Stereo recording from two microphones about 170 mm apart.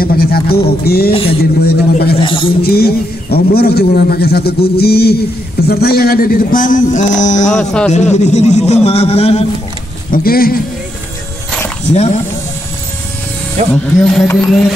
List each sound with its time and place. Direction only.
0.0 s speech: 65° left (ahead or behind)
2.2 s a man's voice: 30° left (ahead or behind)
2.6 s a man's voice: 65° left (ahead or behind); by 7.5 s 45° left (ahead or behind)
7.5 s music: 5° left (ahead or behind)
7.9 s a man's voice: 45° left (ahead or behind)
10.1 s speech: 60° left (ahead or behind)
13.6 s speech: 40° right (ahead or behind)
13.9 s music: 5° left (ahead or behind)